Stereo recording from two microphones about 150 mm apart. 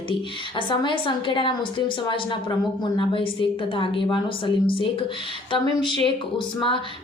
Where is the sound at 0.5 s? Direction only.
30° left (ahead or behind).